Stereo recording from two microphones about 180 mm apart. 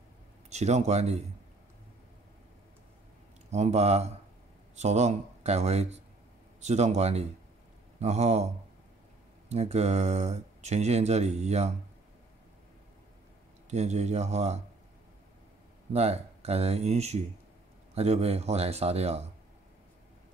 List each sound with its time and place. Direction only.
0.5 s speech: 40° right (ahead or behind)
3.5 s speech: 35° right (ahead or behind)
9.5 s speech: 35° right (ahead or behind)
13.7 s speech: 40° right (ahead or behind)
15.9 s speech: 35° right (ahead or behind)